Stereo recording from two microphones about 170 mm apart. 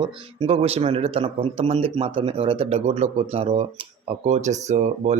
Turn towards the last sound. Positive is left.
turn(degrees=-40)  # may be behind; listen again after turning